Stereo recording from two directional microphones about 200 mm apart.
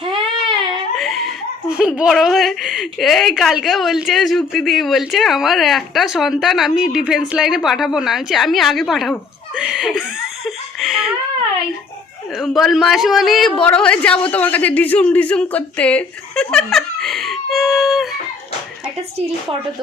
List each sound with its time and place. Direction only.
0.0 s a sound: 25° right (ahead or behind)
0.9 s giggle: centre (ahead or behind)
1.8 s a woman's voice: 5° right (ahead or behind)
9.6 s a sound: 5° right (ahead or behind)
10.4 s laughter: centre (ahead or behind)
12.4 s a man's voice: centre (ahead or behind)